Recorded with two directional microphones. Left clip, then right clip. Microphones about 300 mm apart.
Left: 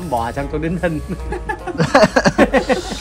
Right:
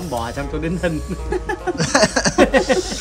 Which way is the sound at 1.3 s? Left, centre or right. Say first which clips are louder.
Right 2 dB; right.